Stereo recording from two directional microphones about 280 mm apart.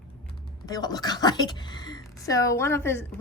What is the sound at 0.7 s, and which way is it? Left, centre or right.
Speech, centre.